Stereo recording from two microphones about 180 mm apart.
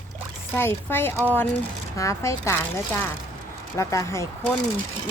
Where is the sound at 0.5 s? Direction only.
15° left (ahead or behind).